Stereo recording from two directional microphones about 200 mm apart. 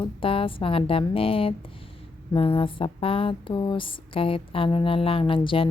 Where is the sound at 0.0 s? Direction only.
25° left (ahead or behind).